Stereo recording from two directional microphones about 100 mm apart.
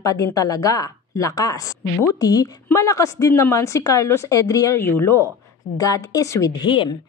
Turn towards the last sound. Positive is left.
turn(degrees=50)  # may be behind; listen again after turning